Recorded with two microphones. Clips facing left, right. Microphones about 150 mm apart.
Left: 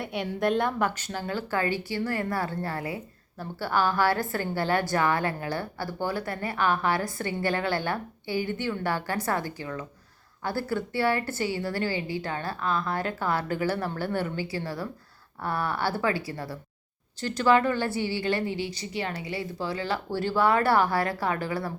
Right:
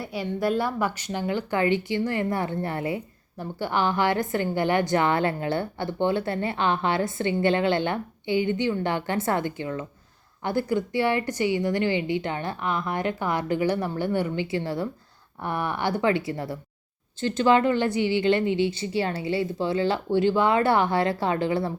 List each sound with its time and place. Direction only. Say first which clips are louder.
0.0 s a woman's voice: right 1 dB; centre (ahead or behind); by 21.7 s 25° right (ahead or behind)